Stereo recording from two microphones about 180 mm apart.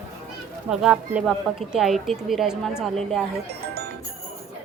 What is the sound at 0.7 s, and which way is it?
Speech, 5° right (ahead or behind).